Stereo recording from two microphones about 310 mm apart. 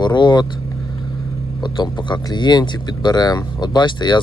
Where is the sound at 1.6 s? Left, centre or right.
Centre.